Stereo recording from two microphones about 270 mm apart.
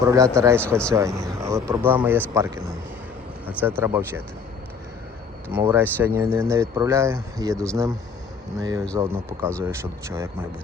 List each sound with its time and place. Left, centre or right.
0.0 s speech: centre
5.5 s speech: centre